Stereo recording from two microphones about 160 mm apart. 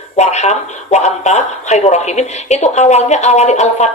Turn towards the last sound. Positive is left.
turn(degrees=45)  # may be behind; listen again after turning